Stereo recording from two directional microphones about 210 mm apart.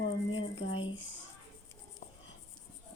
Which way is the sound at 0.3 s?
70° left (ahead or behind).